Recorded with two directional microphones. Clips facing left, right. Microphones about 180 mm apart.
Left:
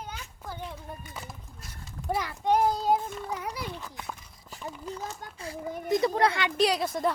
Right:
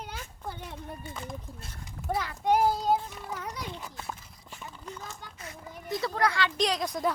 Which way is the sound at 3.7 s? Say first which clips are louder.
Left 1 dB; 15° right (ahead or behind).